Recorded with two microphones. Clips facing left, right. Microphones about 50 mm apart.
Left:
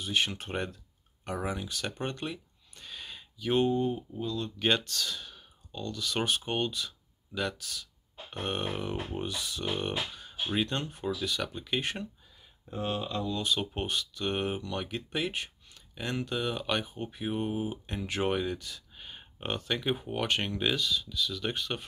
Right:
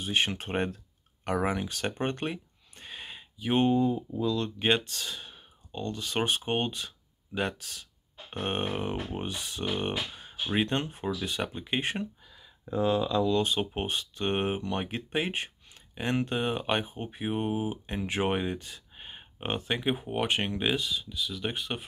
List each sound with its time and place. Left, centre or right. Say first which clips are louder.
0.0 s speech: right 2 dB; right
1.2 s a sound: right 5 dB; right
4.6 s speech: right 1 dB; right
13.4 s speech: right 3 dB; right